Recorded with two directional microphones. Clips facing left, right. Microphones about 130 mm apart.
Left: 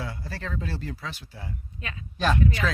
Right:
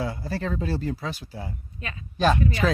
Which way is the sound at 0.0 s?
30° right (ahead or behind).